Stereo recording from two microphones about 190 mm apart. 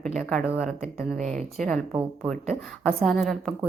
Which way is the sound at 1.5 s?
Centre (ahead or behind).